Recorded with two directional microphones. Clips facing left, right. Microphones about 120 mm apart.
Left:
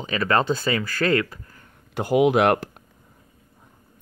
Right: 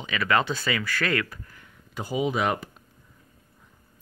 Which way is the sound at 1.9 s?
75° left (ahead or behind).